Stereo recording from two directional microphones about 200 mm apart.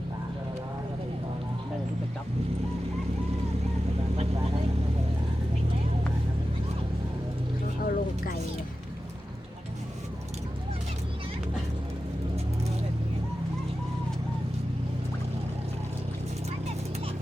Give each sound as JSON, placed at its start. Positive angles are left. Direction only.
{"t": 7.9, "sound": "music", "side_deg": 45}